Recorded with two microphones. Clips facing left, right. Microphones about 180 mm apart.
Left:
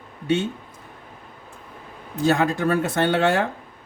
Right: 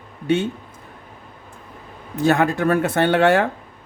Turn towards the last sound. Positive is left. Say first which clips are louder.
# right 4 dB
turn(degrees=-60)  # may be behind; listen again after turning